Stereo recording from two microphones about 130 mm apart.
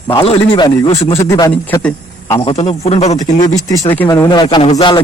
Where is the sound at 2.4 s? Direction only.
50° left (ahead or behind).